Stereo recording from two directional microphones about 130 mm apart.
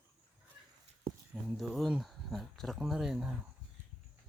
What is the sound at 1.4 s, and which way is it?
Speech, 5° right (ahead or behind).